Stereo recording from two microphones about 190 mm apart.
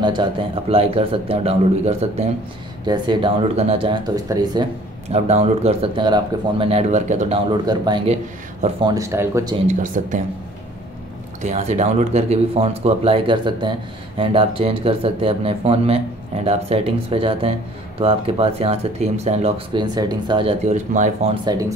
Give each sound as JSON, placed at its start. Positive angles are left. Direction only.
{"t": 0.0, "sound": "speech", "side_deg": -25}
{"t": 5.1, "sound": "speech", "side_deg": -35}
{"t": 7.6, "sound": "speech", "side_deg": -20}
{"t": 9.7, "sound": "speech", "side_deg": -40}
{"t": 11.4, "sound": "speech", "side_deg": -35}